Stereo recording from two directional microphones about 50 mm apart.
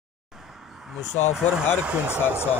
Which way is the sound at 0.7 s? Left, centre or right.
Centre.